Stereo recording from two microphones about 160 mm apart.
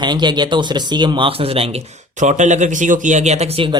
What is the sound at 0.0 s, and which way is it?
Speech, 25° right (ahead or behind).